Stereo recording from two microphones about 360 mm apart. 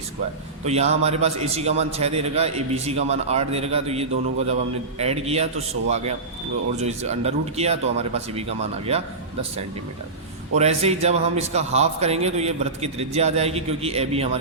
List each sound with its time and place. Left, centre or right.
0.6 s a man's voice: centre